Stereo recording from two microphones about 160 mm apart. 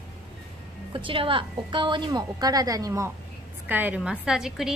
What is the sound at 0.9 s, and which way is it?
A woman's voice, 35° right (ahead or behind).